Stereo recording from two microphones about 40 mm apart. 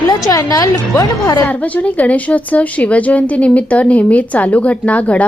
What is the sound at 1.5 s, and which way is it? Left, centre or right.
A woman's voice, left.